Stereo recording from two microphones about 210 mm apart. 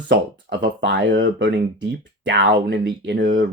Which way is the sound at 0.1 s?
55° right (ahead or behind).